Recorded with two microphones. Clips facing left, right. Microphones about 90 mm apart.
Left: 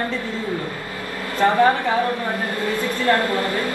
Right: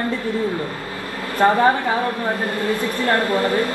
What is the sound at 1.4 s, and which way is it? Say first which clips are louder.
Speech: right 2 dB; 30° right (ahead or behind).